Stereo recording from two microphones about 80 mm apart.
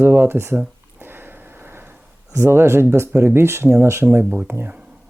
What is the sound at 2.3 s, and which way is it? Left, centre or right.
Speech, right.